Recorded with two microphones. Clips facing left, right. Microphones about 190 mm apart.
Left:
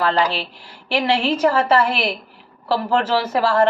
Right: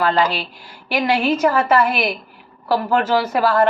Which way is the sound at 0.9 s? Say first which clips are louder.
Right 1 dB; 30° left (ahead or behind).